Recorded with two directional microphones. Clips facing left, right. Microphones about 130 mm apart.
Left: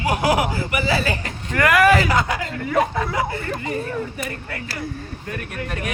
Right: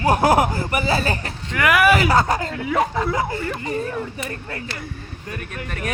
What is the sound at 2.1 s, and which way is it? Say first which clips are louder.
Speech: right 3 dB; 40° right (ahead or behind).